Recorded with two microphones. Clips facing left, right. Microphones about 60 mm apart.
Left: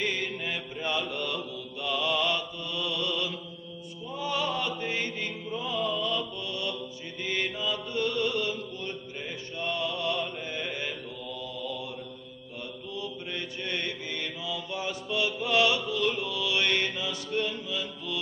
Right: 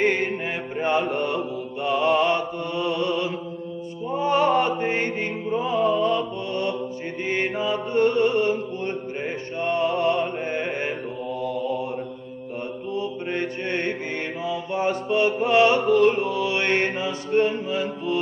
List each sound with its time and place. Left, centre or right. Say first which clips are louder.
0.0 s mantra: right 9 dB; right
4.1 s music: right 11 dB; right
7.2 s mantra: right 6 dB; right
12.9 s mantra: right 9 dB; right